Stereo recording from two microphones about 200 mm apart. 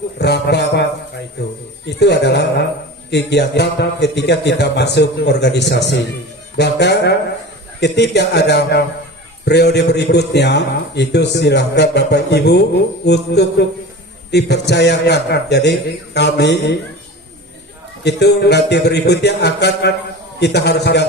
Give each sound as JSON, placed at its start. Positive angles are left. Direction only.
{"t": 0.2, "sound": "a man's voice", "side_deg": 55}
{"t": 18.0, "sound": "a man's voice", "side_deg": 60}